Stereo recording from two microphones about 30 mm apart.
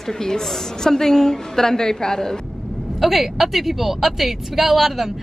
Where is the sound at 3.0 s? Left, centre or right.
Centre.